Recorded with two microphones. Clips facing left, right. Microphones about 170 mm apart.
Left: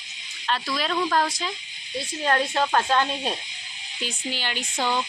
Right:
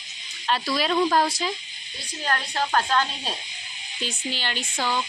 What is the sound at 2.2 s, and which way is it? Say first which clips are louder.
Speech: left 4 dB; 25° left (ahead or behind).